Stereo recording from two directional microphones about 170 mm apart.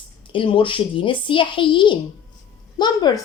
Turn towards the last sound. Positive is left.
turn(degrees=25)  # may be behind; listen again after turning